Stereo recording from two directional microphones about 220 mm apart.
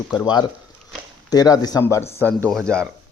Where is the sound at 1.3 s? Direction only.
15° left (ahead or behind).